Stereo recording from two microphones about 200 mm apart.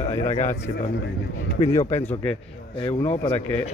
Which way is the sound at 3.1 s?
30° left (ahead or behind).